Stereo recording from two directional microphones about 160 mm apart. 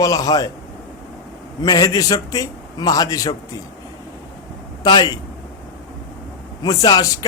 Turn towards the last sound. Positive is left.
turn(degrees=25)  # may be behind; listen again after turning